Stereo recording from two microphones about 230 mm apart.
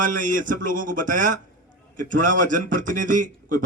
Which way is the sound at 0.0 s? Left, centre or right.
Right.